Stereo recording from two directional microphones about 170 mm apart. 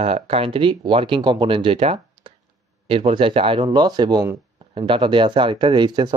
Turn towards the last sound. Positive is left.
turn(degrees=-25)  # may be behind; listen again after turning